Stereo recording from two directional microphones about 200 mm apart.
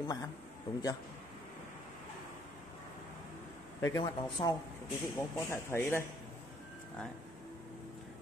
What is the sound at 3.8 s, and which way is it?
Speech, 15° left (ahead or behind).